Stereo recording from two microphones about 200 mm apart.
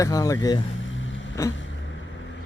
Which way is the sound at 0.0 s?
15° left (ahead or behind).